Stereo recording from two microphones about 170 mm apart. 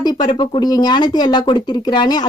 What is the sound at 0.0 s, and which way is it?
Speech, 25° left (ahead or behind).